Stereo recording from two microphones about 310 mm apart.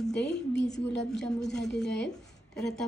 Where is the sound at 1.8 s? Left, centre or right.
Left.